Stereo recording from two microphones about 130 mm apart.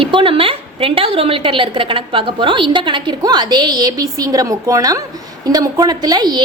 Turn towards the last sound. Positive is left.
turn(degrees=-30)  # may be behind; listen again after turning